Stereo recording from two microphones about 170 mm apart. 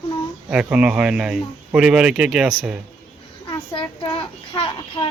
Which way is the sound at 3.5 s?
30° left (ahead or behind).